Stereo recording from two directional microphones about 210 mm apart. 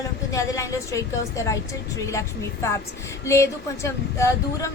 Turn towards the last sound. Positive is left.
turn(degrees=15)  # may be behind; listen again after turning